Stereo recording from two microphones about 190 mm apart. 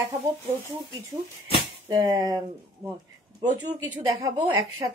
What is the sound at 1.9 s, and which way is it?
Speech, 20° right (ahead or behind).